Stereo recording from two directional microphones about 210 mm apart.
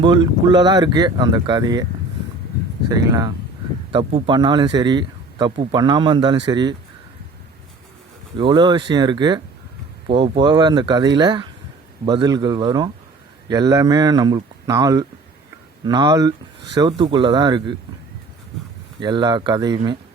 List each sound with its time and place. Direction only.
0.0 s a man's voice: 20° right (ahead or behind)
2.9 s a man's voice: 15° right (ahead or behind)
8.4 s a man's voice: 20° right (ahead or behind)
18.9 s a man's voice: 20° right (ahead or behind)